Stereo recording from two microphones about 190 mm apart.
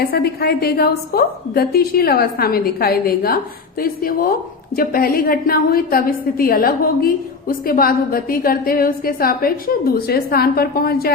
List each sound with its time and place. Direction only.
0.0 s a woman's voice: 55° left (ahead or behind)